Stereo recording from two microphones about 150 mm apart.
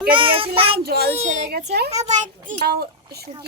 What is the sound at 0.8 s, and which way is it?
Speech, 90° right.